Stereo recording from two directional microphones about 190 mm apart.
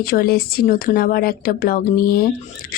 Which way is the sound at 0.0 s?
50° left (ahead or behind).